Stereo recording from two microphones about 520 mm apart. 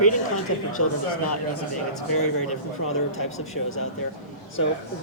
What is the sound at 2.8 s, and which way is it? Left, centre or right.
Speech, left.